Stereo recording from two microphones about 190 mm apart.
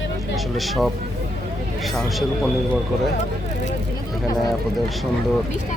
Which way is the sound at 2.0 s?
Centre (ahead or behind).